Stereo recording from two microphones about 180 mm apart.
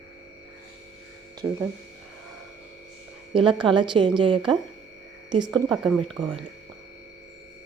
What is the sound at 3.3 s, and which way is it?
A woman's voice, 30° right (ahead or behind).